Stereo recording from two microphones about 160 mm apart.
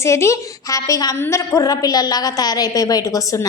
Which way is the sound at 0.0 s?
20° left (ahead or behind).